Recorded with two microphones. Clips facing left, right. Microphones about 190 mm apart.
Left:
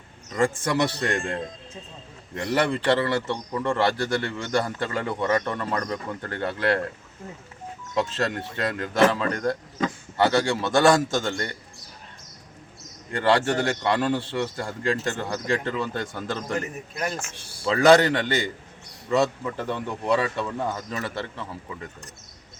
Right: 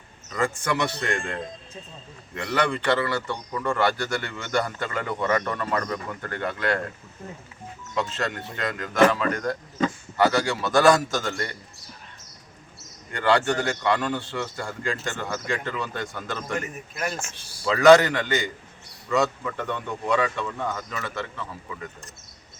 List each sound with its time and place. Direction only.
0.3 s a man's voice: 30° left (ahead or behind)
7.9 s a man's voice: 35° left (ahead or behind)
13.1 s speech: 35° left (ahead or behind)
17.2 s speech: 60° left (ahead or behind)
17.7 s speech: 30° left (ahead or behind)